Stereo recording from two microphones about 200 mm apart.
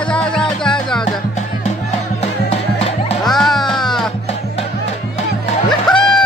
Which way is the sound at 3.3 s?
Centre (ahead or behind).